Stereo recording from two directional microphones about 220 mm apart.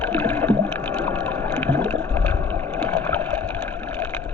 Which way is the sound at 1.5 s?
10° left (ahead or behind).